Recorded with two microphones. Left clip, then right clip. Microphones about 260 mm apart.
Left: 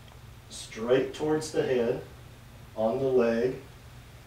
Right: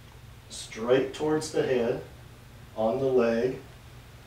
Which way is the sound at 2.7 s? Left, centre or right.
Right.